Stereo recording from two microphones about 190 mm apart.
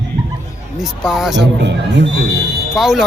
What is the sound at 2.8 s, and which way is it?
Speech, centre (ahead or behind).